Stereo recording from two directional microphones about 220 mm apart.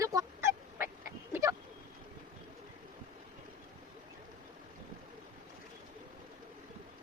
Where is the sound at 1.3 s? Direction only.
15° right (ahead or behind).